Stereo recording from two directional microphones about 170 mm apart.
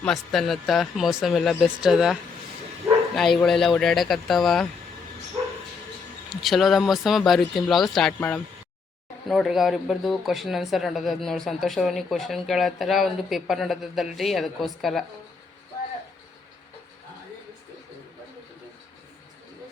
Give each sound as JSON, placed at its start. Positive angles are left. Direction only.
{"t": 0.0, "sound": "speech", "side_deg": 0}
{"t": 3.2, "sound": "speech", "side_deg": 0}
{"t": 6.3, "sound": "speech", "side_deg": 0}